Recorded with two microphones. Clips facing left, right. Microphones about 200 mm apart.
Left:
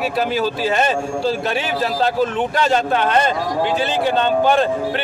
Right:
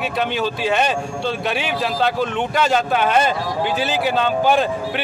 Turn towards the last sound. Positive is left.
turn(degrees=-5)  # may be behind; listen again after turning